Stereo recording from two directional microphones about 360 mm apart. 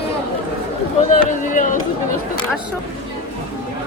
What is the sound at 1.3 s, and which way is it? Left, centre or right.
Run, left.